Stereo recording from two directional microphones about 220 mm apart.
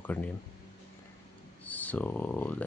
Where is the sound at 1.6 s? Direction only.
5° left (ahead or behind).